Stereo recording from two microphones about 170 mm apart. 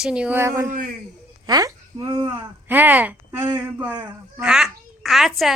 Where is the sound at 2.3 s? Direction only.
10° right (ahead or behind).